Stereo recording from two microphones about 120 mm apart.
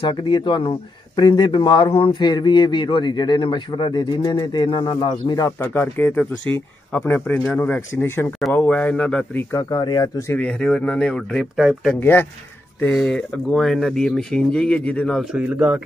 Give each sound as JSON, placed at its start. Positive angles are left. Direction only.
{"t": 0.0, "sound": "speech", "side_deg": 40}
{"t": 5.6, "sound": "speech", "side_deg": 15}
{"t": 10.4, "sound": "speech", "side_deg": 10}
{"t": 11.5, "sound": "speech", "side_deg": -5}
{"t": 12.0, "sound": "speech", "side_deg": 20}
{"t": 12.9, "sound": "speech", "side_deg": 5}
{"t": 15.3, "sound": "a man's voice", "side_deg": -10}